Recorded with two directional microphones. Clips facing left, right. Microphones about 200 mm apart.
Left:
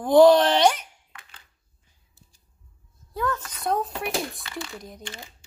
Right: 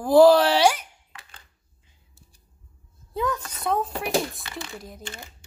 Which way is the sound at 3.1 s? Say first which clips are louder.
Right 1 dB; 15° right (ahead or behind).